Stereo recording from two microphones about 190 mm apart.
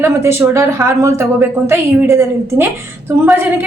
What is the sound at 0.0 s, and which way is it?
Speech, 15° right (ahead or behind).